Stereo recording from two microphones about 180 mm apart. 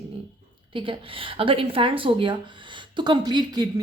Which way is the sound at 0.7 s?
30° right (ahead or behind).